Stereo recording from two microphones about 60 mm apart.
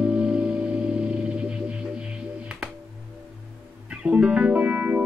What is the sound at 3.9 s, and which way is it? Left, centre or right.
Music, centre.